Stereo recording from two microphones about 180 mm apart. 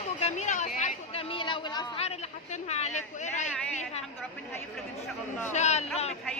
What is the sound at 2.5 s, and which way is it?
Speech, 40° left (ahead or behind).